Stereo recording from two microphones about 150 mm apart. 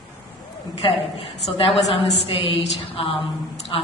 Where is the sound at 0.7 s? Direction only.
35° left (ahead or behind).